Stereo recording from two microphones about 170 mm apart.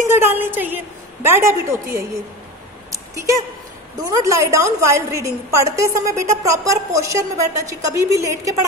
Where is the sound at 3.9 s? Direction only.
20° right (ahead or behind).